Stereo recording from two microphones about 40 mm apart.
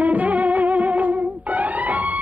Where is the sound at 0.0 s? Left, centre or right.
Right.